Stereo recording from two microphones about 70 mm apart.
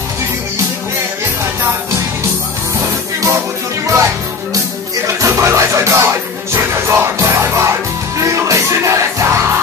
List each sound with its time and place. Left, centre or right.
3.8 s music: right